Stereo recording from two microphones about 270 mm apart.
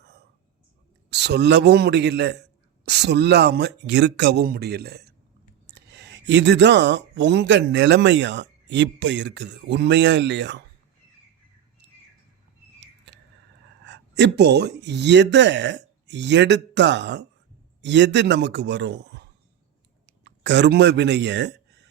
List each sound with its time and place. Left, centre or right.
1.1 s speech: right
13.8 s speech: right